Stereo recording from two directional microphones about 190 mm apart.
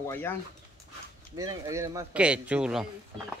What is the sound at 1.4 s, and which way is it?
Speech, 15° right (ahead or behind).